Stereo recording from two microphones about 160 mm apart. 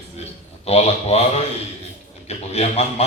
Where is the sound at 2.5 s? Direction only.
40° left (ahead or behind).